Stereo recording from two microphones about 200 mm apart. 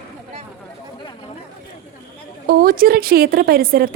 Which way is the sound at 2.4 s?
45° right (ahead or behind).